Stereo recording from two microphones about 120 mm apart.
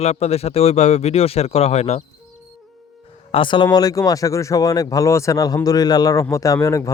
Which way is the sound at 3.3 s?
45° left (ahead or behind).